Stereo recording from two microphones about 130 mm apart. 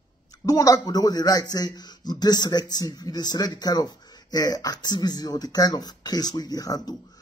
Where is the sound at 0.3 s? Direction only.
25° left (ahead or behind).